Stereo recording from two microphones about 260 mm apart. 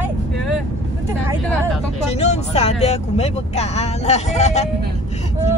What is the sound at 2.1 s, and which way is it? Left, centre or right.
Speech, left.